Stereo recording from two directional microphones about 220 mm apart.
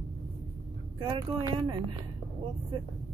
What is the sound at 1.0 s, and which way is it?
Speech, 20° right (ahead or behind).